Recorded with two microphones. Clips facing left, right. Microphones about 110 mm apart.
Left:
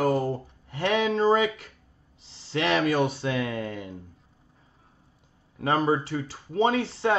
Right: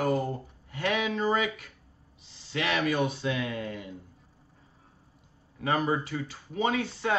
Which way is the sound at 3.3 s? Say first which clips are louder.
Left 3 dB; 50° left (ahead or behind).